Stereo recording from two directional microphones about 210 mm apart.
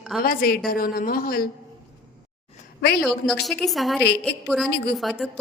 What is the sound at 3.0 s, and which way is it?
A woman's voice, centre (ahead or behind).